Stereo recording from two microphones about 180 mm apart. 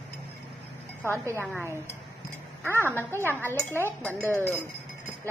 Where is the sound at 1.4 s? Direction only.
10° left (ahead or behind).